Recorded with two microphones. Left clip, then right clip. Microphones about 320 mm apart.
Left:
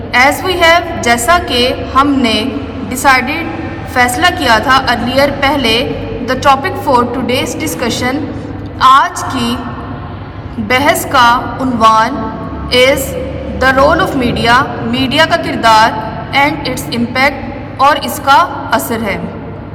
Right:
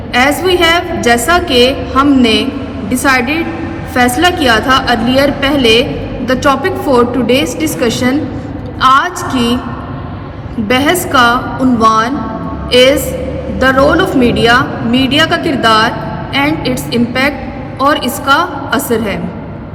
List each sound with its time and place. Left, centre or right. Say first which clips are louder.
0.1 s a woman's voice: even; centre
3.9 s a woman's voice: even; centre
10.7 s a woman's voice: left 1 dB; centre
13.6 s a woman's voice: even; centre